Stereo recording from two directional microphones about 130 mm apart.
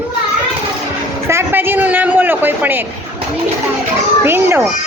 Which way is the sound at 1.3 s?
15° right (ahead or behind).